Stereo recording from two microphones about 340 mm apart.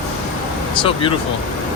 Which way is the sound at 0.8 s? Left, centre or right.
Centre.